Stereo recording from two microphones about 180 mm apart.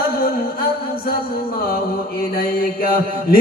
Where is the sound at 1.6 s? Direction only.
55° left (ahead or behind).